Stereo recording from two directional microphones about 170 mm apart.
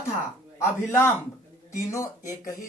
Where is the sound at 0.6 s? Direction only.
15° left (ahead or behind).